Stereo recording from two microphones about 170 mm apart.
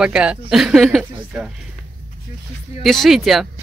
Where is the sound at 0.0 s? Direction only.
5° right (ahead or behind).